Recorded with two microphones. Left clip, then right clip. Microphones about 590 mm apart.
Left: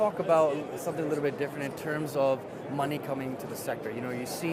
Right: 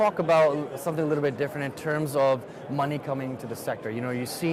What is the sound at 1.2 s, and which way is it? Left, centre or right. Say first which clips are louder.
Speech: right 3 dB; right.